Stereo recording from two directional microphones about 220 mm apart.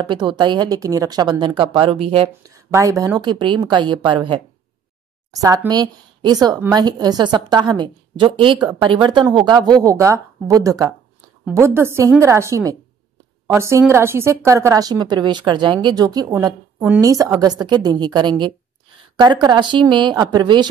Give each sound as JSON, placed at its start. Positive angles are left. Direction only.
{"t": 0.0, "sound": "speech", "side_deg": -20}
{"t": 2.7, "sound": "a woman's voice", "side_deg": -15}